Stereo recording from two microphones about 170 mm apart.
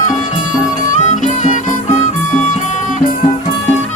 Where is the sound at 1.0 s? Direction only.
45° left (ahead or behind).